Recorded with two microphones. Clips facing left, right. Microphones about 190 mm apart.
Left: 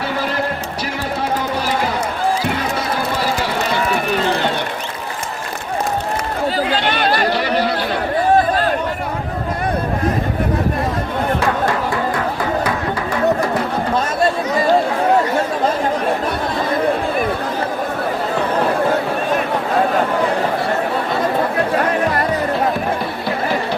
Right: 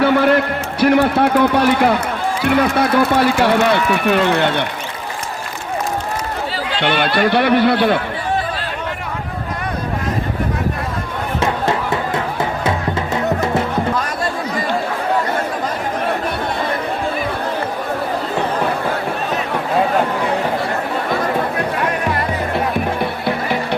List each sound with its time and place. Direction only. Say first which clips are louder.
0.0 s a man's voice: right 8 dB; 60° right (ahead or behind)
6.6 s chatter: right 3 dB; 40° left (ahead or behind)
7.2 s a man's voice: right 4 dB; 60° right (ahead or behind)
11.3 s music: even; 20° right (ahead or behind)